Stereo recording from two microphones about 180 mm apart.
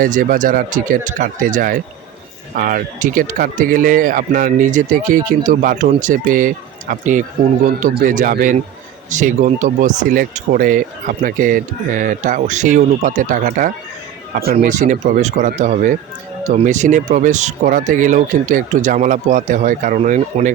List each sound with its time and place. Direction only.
0.0 s speech: 50° right (ahead or behind)